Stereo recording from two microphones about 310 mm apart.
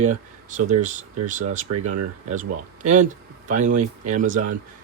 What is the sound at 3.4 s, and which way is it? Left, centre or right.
Speech, right.